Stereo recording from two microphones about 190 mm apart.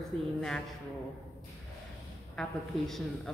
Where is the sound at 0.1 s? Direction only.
5° left (ahead or behind).